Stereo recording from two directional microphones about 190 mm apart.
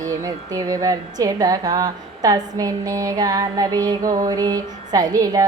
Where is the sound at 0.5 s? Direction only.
20° right (ahead or behind).